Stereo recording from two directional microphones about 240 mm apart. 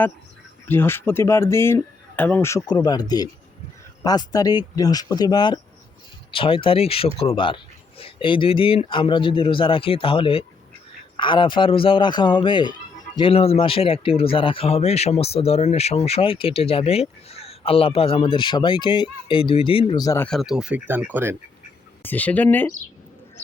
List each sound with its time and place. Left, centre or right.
0.7 s speech: centre
20.2 s speech: centre
22.0 s speech: centre